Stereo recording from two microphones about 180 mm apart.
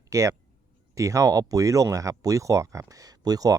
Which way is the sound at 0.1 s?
20° right (ahead or behind).